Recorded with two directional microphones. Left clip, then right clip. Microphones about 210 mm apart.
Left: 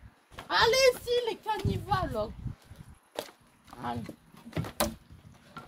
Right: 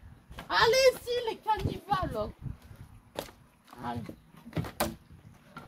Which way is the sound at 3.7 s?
10° left (ahead or behind).